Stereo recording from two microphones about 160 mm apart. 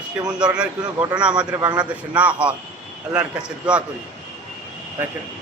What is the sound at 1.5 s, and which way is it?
Speech, 25° right (ahead or behind).